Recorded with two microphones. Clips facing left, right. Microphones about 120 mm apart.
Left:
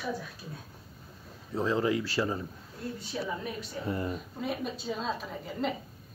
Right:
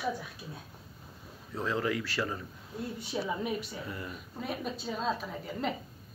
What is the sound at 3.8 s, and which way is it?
Speech, 35° left (ahead or behind).